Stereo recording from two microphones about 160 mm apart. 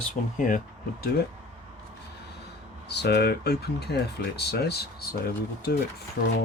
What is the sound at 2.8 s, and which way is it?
Speech, 90° left.